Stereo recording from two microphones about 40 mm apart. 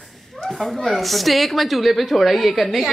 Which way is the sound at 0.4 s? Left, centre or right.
Left.